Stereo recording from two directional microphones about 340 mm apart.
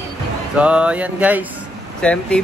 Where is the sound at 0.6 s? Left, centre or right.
Centre.